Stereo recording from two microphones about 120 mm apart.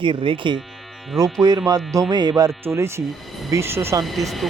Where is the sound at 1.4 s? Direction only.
30° right (ahead or behind).